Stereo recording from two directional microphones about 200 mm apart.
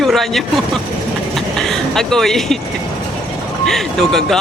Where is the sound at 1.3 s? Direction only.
Centre (ahead or behind).